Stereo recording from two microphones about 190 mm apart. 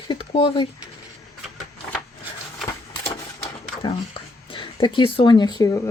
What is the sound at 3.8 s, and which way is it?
Speech, 25° left (ahead or behind).